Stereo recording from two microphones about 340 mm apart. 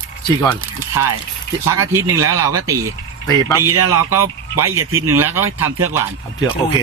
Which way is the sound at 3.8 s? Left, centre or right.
Right.